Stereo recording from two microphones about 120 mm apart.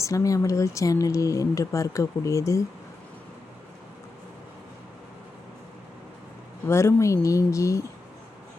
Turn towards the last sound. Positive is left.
turn(degrees=25)  # may be behind; listen again after turning